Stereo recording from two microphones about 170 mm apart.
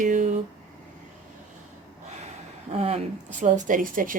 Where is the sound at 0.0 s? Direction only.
50° right (ahead or behind).